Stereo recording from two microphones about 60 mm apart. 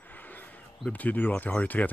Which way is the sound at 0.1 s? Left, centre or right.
Left.